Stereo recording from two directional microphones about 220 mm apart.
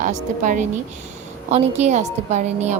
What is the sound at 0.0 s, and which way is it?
A woman's voice, 35° right (ahead or behind).